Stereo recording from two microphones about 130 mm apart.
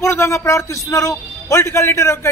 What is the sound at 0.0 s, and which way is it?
A man's voice, 20° left (ahead or behind).